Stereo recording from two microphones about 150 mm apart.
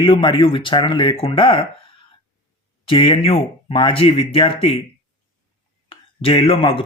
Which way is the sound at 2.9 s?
35° left (ahead or behind).